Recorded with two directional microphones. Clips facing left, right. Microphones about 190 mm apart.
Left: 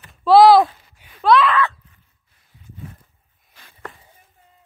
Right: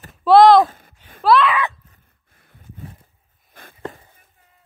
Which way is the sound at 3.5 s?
50° right (ahead or behind).